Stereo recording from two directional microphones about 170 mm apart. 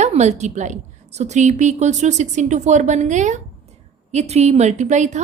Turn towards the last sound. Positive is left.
turn(degrees=-45)  # may be behind; listen again after turning